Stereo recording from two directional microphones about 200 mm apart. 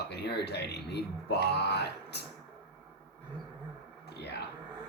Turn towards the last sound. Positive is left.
turn(degrees=55)  # may be behind; listen again after turning